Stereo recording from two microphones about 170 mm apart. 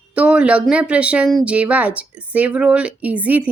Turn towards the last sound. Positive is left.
turn(degrees=-10)  # may be behind; listen again after turning